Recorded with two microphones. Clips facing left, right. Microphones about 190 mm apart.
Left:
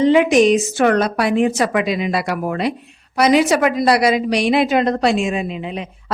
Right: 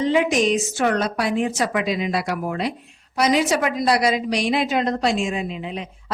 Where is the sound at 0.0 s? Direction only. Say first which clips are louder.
Left 7 dB; 70° left (ahead or behind).